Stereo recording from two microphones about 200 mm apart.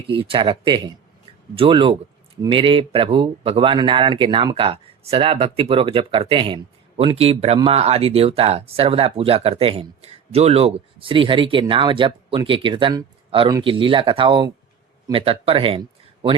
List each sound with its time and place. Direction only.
0.1 s speech: 25° right (ahead or behind)